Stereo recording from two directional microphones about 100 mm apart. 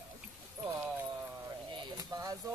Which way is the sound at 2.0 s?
40° right (ahead or behind).